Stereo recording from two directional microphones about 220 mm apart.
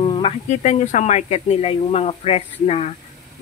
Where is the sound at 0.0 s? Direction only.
25° left (ahead or behind).